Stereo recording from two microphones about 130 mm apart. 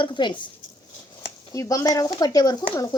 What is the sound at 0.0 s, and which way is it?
Speech, 35° left (ahead or behind).